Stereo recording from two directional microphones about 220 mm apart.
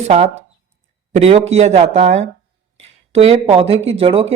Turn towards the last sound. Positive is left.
turn(degrees=-25)  # may be behind; listen again after turning